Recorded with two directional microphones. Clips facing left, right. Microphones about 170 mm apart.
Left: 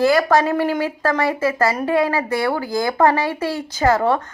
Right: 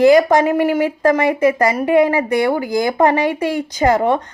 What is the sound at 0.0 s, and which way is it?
Speech, 20° right (ahead or behind).